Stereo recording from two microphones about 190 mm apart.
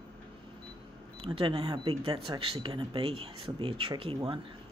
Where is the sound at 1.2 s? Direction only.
25° right (ahead or behind).